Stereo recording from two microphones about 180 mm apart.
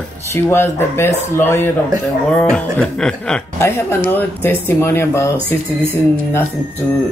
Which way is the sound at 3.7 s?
15° left (ahead or behind).